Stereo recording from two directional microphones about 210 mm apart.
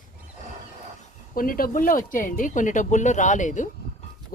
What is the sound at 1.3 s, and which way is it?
Speech, 45° left (ahead or behind).